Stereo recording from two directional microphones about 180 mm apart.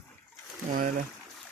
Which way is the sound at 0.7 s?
50° right (ahead or behind).